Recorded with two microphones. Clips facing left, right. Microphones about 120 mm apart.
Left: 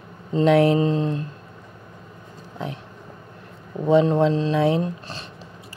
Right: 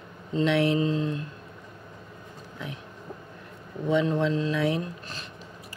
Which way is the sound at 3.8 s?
35° left (ahead or behind).